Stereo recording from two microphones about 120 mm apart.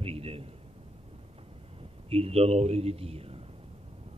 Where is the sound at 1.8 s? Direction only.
55° right (ahead or behind).